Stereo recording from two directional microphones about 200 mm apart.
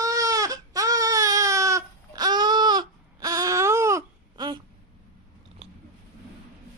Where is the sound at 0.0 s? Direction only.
15° right (ahead or behind).